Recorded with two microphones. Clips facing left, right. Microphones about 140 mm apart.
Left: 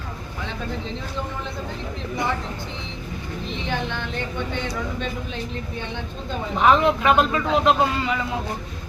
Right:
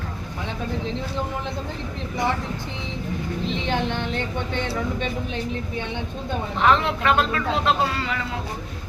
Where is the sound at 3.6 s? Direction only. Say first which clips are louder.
Right 2 dB; 20° right (ahead or behind).